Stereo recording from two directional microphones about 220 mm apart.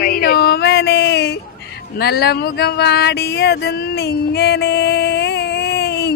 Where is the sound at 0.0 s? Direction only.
45° left (ahead or behind).